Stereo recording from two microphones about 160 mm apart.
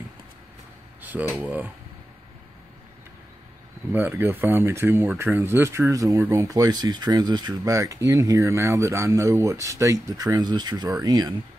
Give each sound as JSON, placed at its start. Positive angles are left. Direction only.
{"t": 1.0, "sound": "speech", "side_deg": -10}
{"t": 3.9, "sound": "speech", "side_deg": -10}